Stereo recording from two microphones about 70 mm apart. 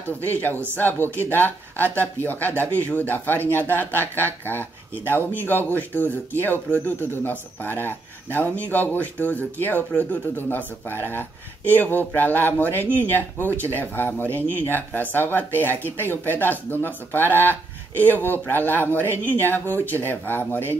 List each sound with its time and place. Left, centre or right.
0.2 s speech: left